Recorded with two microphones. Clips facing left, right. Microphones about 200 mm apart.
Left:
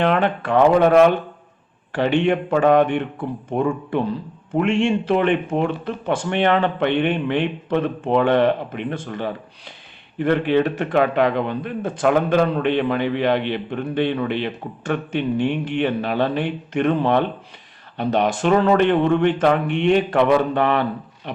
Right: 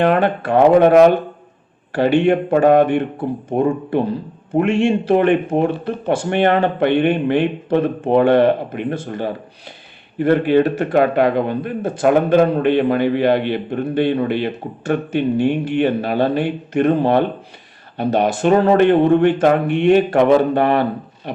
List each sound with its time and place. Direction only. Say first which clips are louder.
0.0 s a man's voice: right 3 dB; 45° right (ahead or behind)
1.9 s a man's voice: right 4 dB; 40° right (ahead or behind)